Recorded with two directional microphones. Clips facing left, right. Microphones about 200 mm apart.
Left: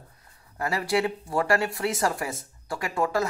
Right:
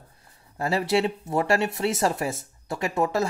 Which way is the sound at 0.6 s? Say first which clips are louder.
Right 2 dB; 25° right (ahead or behind).